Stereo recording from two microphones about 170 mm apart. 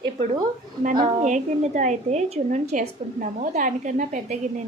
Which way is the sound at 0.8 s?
50° right (ahead or behind).